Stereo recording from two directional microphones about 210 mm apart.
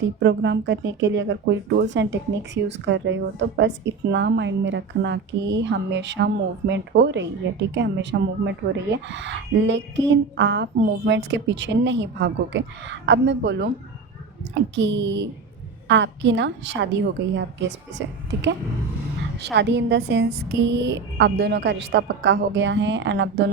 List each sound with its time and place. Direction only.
0.0 s speech: 55° right (ahead or behind)
19.4 s speech: 55° right (ahead or behind)